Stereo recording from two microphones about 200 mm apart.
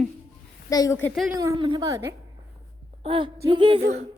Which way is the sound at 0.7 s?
15° left (ahead or behind).